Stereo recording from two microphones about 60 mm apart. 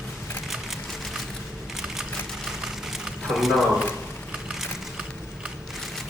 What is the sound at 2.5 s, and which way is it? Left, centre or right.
Vehicle, centre.